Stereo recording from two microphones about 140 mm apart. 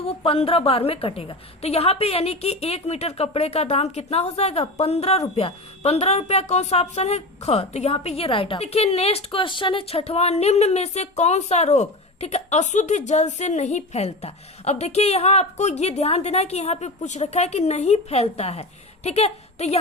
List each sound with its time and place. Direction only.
0.0 s a woman's voice: 45° left (ahead or behind)